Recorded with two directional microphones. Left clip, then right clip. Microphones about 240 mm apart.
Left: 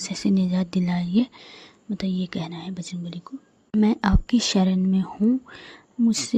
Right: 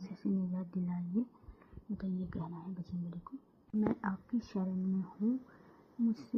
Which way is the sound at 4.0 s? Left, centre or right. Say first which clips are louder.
Left 16 dB; left.